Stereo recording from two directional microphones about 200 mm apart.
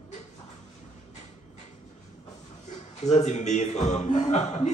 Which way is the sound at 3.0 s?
35° left (ahead or behind).